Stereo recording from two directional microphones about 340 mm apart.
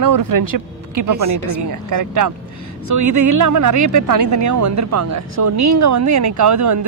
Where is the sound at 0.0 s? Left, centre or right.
Right.